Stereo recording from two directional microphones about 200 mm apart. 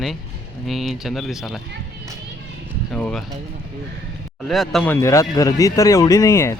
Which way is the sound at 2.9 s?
5° left (ahead or behind).